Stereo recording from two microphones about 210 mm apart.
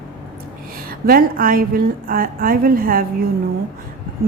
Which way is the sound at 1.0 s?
45° right (ahead or behind).